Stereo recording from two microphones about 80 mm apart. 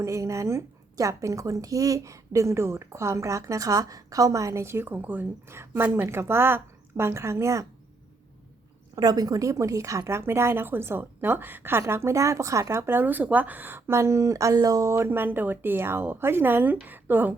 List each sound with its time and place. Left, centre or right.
0.0 s a woman's voice: right
9.0 s a woman's voice: right